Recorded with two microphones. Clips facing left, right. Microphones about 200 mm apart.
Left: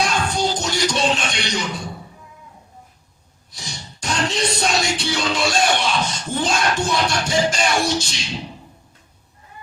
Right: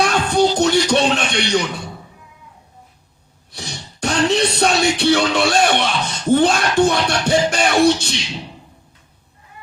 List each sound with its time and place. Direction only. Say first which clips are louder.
0.0 s music: right 6 dB; 60° right (ahead or behind)
3.5 s music: right 4 dB; 60° right (ahead or behind)